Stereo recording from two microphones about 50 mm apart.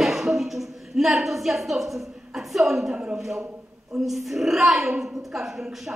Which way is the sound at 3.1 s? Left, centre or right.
Centre.